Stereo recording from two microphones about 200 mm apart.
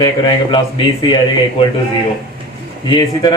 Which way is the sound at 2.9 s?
20° left (ahead or behind).